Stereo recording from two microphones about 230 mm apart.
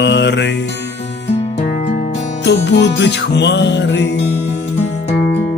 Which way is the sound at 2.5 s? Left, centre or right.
Left.